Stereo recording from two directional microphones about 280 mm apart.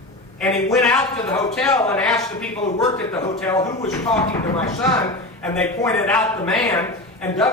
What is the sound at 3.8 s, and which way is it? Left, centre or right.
A man's voice, centre.